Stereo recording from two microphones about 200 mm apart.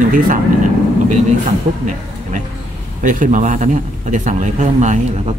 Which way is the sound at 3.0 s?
40° right (ahead or behind).